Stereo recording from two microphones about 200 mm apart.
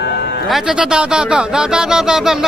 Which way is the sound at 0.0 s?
55° left (ahead or behind).